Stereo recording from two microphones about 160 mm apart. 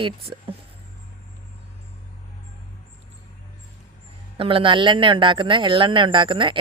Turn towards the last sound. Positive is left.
turn(degrees=-30)  # may be behind; listen again after turning